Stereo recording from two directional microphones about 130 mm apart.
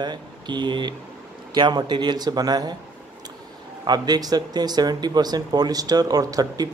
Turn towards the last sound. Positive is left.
turn(degrees=-30)  # may be behind; listen again after turning